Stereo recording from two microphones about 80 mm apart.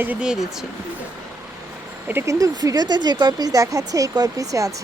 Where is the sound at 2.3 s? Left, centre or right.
Right.